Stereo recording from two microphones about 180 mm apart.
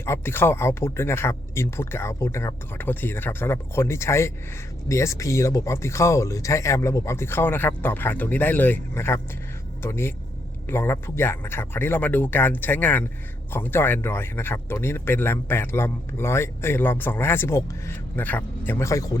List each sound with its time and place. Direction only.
0.0 s speech: 15° left (ahead or behind)